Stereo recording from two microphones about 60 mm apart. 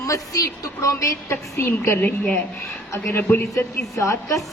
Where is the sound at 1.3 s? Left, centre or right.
Left.